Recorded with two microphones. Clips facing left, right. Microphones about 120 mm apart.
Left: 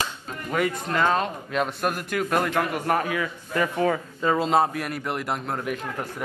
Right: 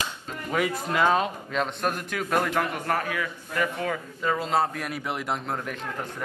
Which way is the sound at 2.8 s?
25° left (ahead or behind).